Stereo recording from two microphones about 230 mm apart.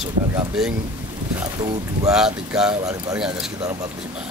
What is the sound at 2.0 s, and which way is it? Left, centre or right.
Speech, centre.